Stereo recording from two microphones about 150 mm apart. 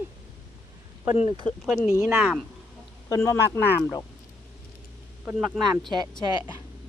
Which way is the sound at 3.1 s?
20° left (ahead or behind).